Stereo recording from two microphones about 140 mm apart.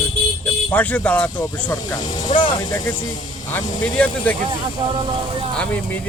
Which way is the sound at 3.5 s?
10° left (ahead or behind).